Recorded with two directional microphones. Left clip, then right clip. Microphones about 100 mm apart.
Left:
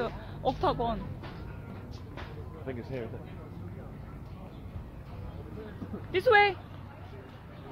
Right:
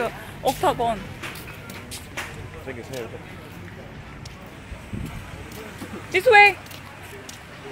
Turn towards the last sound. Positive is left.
turn(degrees=-5)  # may be behind; listen again after turning